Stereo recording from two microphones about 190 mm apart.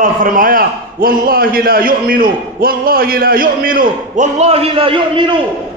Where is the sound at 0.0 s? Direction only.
45° right (ahead or behind).